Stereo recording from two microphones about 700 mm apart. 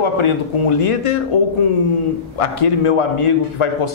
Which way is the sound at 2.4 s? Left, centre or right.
Left.